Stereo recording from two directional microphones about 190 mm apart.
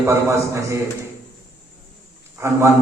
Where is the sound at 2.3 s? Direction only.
15° right (ahead or behind).